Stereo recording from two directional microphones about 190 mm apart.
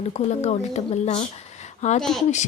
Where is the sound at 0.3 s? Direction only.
35° left (ahead or behind).